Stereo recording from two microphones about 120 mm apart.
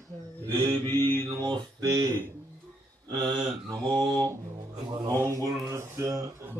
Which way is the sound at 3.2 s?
40° right (ahead or behind).